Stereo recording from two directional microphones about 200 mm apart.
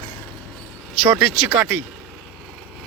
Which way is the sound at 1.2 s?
5° right (ahead or behind).